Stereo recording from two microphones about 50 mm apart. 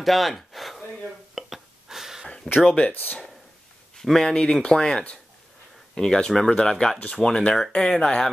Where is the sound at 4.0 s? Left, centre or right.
Centre.